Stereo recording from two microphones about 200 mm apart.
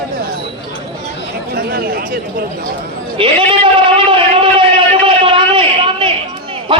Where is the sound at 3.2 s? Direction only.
25° right (ahead or behind).